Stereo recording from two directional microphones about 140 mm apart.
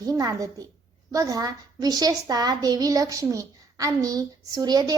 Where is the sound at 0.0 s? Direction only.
25° right (ahead or behind).